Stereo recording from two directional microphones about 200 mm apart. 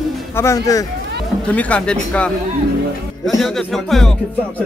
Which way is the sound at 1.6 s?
5° left (ahead or behind).